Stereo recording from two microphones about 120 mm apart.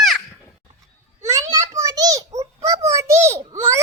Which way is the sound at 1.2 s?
25° right (ahead or behind).